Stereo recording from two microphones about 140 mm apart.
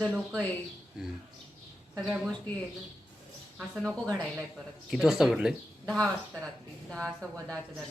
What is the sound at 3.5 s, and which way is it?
Speech, 5° right (ahead or behind).